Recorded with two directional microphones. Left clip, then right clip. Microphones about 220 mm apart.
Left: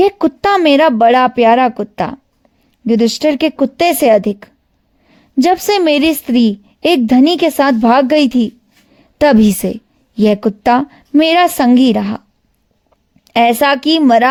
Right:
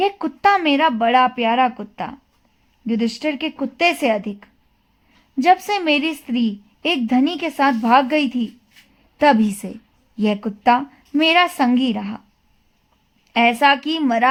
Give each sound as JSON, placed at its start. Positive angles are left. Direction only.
{"t": 0.0, "sound": "a woman's voice", "side_deg": 45}
{"t": 13.2, "sound": "a woman's voice", "side_deg": 45}